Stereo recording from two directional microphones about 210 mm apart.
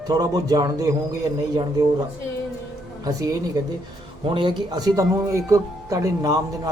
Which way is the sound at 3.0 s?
15° right (ahead or behind).